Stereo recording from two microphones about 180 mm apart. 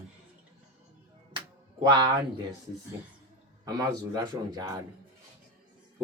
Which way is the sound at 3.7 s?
20° right (ahead or behind).